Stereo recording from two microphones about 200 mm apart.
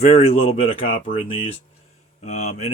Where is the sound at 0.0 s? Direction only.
30° left (ahead or behind).